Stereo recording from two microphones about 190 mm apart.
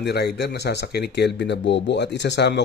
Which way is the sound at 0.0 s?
60° left (ahead or behind).